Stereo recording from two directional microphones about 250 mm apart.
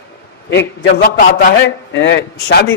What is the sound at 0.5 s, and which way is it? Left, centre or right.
A man's voice, left.